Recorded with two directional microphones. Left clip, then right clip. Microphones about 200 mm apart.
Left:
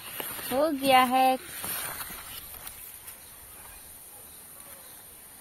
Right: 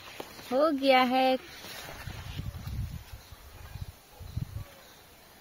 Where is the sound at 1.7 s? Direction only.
10° left (ahead or behind).